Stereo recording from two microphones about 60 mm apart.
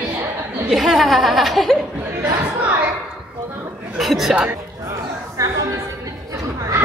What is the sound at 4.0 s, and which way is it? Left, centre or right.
Speech, centre.